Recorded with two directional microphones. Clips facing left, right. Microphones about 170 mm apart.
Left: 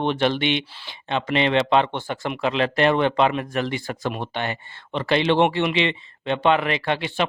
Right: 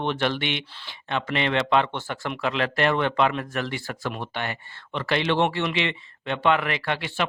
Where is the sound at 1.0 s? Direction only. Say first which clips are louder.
Left 4 dB; 20° left (ahead or behind).